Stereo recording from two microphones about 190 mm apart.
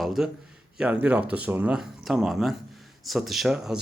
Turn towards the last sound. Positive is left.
turn(degrees=-5)  # may be behind; listen again after turning